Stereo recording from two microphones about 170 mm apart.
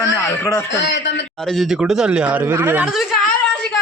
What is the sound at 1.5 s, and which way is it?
Speech, centre (ahead or behind).